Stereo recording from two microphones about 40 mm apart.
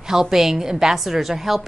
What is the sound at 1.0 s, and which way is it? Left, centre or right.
Speech, centre.